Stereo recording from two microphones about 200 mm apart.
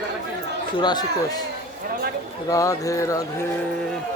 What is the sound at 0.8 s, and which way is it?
Speech, 20° left (ahead or behind).